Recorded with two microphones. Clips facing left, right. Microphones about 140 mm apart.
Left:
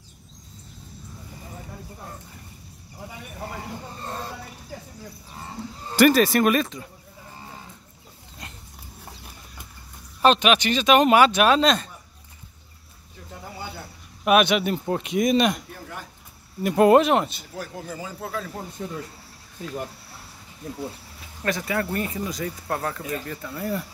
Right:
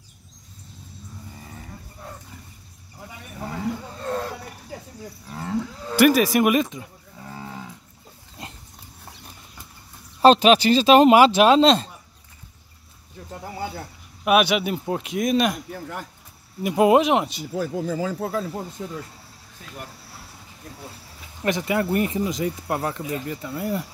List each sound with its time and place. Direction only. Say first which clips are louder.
4.0 s a sound: right 7 dB; 90° right
5.3 s moo: right 9 dB; 85° right
5.9 s speech: even; 5° right (ahead or behind)
7.2 s moo: right 6 dB; 90° right
10.2 s speech: right 5 dB; 35° right (ahead or behind)
14.2 s speech: even; 5° right (ahead or behind)
16.6 s speech: left 1 dB; 5° right (ahead or behind)
18.2 s speech: right 5 dB; 25° right (ahead or behind)
18.8 s speech: even; 5° right (ahead or behind)
21.4 s speech: right 3 dB; 20° right (ahead or behind)